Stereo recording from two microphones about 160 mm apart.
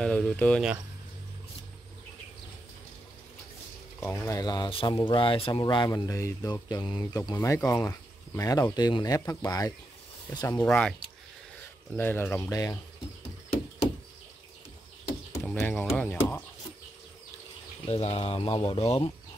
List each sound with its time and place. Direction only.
0.0 s speech: 5° left (ahead or behind)
4.0 s speech: 15° left (ahead or behind)
10.7 s speech: 5° left (ahead or behind); by 12.7 s 25° left (ahead or behind)
15.4 s speech: 5° left (ahead or behind)
17.8 s speech: 40° left (ahead or behind)